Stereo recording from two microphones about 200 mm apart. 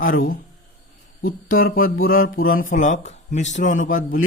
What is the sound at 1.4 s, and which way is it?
Speech, 45° left (ahead or behind).